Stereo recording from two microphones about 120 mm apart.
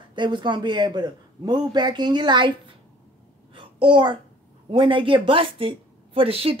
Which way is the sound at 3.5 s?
45° right (ahead or behind).